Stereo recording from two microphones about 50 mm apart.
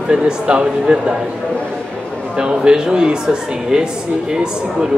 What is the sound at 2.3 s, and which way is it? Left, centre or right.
Speech, centre.